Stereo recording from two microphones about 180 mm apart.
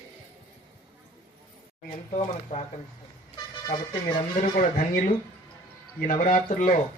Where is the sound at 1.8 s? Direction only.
40° left (ahead or behind).